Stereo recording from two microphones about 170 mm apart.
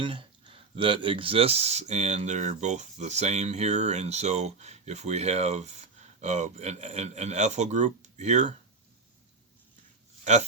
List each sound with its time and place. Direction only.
0.0 s speech: 30° right (ahead or behind)